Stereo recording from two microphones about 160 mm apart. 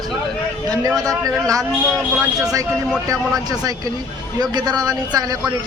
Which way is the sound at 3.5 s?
20° right (ahead or behind).